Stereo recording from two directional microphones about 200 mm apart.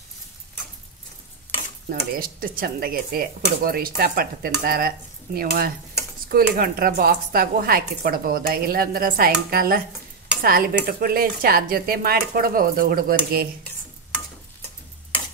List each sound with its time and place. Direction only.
1.9 s speech: 45° right (ahead or behind)